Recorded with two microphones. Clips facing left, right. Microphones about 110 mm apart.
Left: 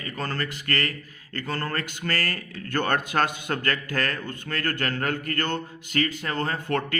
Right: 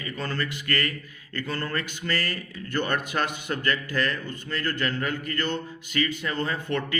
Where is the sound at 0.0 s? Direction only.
40° left (ahead or behind).